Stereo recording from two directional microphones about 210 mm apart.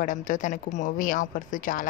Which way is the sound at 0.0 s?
40° left (ahead or behind).